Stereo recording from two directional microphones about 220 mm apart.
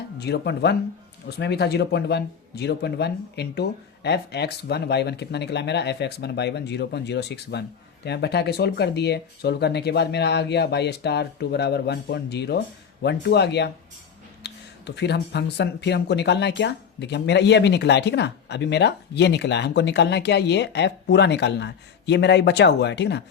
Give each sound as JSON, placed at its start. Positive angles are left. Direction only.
{"t": 0.2, "sound": "speech", "side_deg": 50}